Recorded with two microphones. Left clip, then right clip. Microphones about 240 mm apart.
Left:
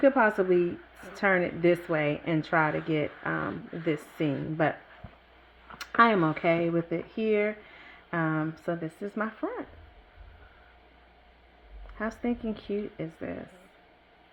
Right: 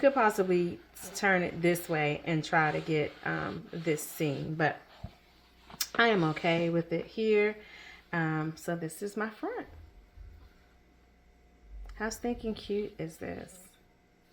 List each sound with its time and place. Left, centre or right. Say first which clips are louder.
0.0 s speech: left 3 dB; left
6.0 s speech: left 4 dB; left
11.9 s speech: left 2 dB; left